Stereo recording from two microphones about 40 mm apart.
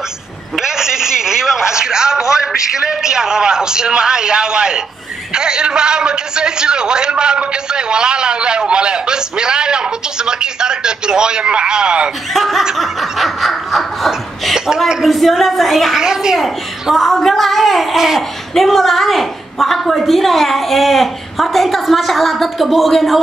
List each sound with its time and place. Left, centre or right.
0.6 s a man's voice: centre
12.4 s a woman's voice: centre
16.0 s a man's voice: centre
16.9 s a woman's voice: centre